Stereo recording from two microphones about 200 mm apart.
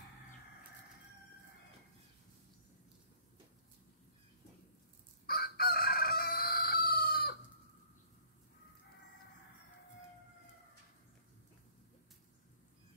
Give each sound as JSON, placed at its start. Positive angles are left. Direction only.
{"t": 5.2, "sound": "chicken", "side_deg": 50}